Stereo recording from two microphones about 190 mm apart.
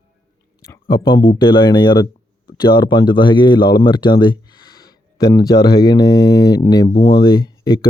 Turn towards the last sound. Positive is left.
turn(degrees=25)  # may be behind; listen again after turning